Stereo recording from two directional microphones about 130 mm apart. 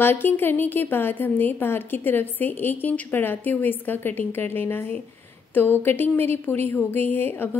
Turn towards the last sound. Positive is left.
turn(degrees=15)  # may be behind; listen again after turning